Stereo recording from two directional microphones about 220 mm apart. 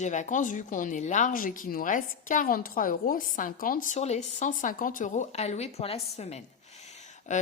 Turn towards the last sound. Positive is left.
turn(degrees=35)  # may be behind; listen again after turning